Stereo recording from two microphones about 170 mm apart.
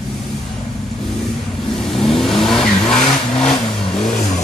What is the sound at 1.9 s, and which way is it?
Vehicle, centre (ahead or behind).